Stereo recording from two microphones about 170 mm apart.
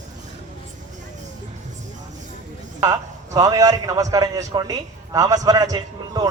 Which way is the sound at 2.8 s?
20° right (ahead or behind).